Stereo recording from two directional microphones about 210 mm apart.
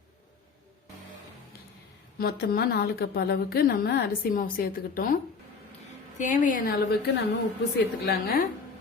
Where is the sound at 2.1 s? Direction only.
45° left (ahead or behind).